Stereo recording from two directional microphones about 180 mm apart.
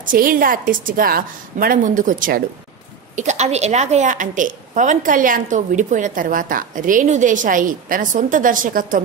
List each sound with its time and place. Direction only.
0.0 s a woman's voice: 50° right (ahead or behind)